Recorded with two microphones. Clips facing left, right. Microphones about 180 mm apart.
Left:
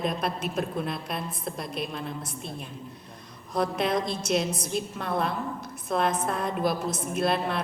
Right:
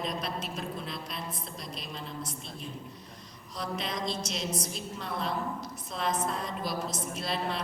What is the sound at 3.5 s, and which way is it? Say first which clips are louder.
A woman's voice: left 10 dB; 55° left (ahead or behind).